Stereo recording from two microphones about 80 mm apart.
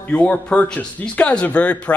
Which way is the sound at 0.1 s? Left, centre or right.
Centre.